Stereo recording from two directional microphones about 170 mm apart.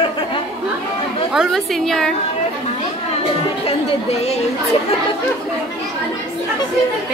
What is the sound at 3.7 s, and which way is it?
Speech, 40° left (ahead or behind).